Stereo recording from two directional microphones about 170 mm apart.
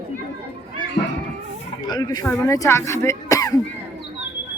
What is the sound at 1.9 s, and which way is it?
Speech, 25° left (ahead or behind).